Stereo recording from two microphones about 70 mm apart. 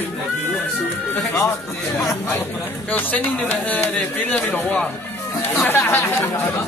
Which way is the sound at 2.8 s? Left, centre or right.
Left.